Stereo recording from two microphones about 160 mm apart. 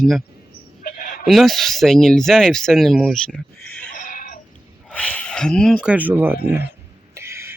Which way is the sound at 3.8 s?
60° left (ahead or behind).